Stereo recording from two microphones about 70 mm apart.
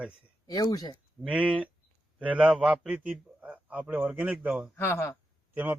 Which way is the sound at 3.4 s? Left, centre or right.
Right.